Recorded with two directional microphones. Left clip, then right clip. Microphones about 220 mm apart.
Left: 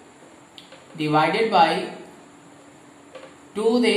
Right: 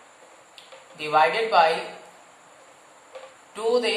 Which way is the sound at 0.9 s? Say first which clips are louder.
Even; 20° right (ahead or behind).